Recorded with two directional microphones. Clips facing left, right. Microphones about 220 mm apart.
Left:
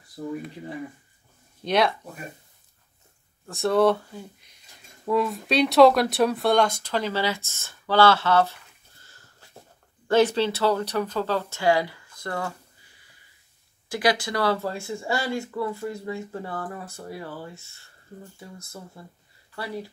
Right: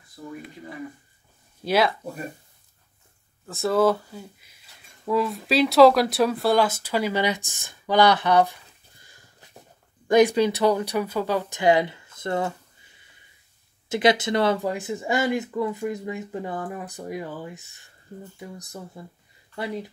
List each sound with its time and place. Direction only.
1.6 s speech: 5° right (ahead or behind)
3.4 s speech: centre (ahead or behind); by 19.9 s 20° right (ahead or behind)